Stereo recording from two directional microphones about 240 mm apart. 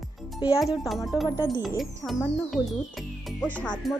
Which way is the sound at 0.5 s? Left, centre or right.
Centre.